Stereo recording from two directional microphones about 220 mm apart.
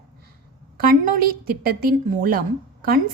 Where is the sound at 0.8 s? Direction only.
40° right (ahead or behind).